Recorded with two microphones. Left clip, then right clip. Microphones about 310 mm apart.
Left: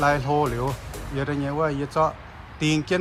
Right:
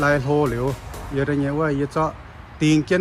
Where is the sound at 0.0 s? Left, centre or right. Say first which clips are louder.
Right 2 dB; centre.